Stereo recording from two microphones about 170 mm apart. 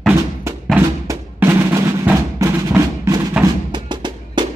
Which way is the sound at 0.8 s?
15° right (ahead or behind).